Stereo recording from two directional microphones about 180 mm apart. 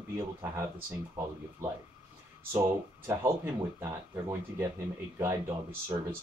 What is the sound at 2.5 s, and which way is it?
Speech, 15° right (ahead or behind).